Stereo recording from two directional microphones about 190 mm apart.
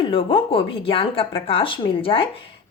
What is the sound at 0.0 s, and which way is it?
Speech, 25° left (ahead or behind).